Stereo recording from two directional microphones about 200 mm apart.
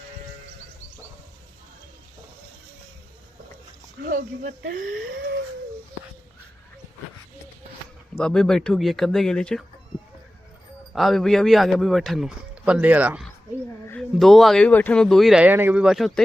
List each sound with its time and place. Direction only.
4.0 s speech: 45° right (ahead or behind)
8.2 s a man's voice: 5° left (ahead or behind)
10.9 s a man's voice: centre (ahead or behind)
13.8 s a man's voice: 5° left (ahead or behind)